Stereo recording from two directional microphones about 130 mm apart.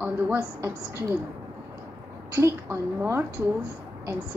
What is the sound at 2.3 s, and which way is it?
Speech, 20° right (ahead or behind).